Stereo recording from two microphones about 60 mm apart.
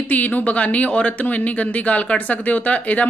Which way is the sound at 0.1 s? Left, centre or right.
Left.